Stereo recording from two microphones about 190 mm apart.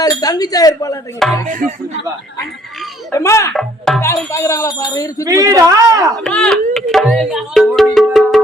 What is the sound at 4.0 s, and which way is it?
Speech, 15° left (ahead or behind).